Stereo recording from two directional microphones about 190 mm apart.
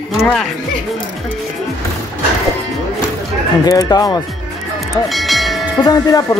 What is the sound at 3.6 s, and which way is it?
Speech, 20° left (ahead or behind).